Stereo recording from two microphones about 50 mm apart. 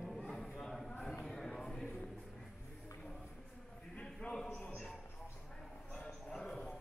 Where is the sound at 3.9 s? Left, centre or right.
Centre.